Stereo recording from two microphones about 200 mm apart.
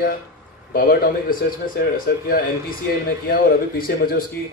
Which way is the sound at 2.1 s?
50° left (ahead or behind).